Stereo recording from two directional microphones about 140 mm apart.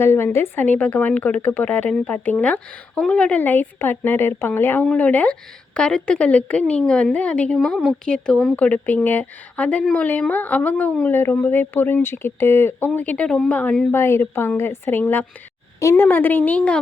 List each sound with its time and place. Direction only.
0.0 s speech: 15° left (ahead or behind)